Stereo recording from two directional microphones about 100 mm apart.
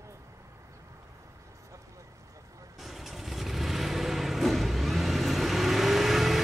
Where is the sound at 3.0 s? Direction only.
Centre (ahead or behind).